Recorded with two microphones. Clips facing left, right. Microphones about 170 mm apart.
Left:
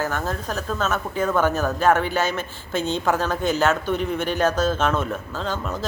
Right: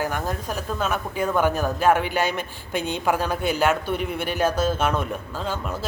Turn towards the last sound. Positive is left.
turn(degrees=-10)  # may be behind; listen again after turning